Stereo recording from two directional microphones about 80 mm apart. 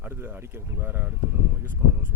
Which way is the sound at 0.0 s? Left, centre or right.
Right.